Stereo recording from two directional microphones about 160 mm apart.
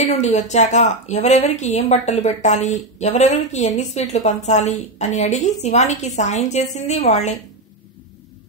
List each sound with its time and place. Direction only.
0.0 s a woman's voice: 45° left (ahead or behind)